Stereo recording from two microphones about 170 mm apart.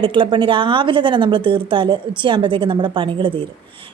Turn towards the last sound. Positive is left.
turn(degrees=-30)  # may be behind; listen again after turning